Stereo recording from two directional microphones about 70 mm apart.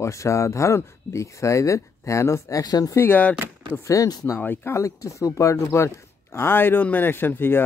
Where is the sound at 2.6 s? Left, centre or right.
Left.